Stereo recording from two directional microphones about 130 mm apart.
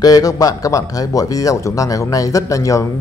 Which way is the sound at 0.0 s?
30° left (ahead or behind).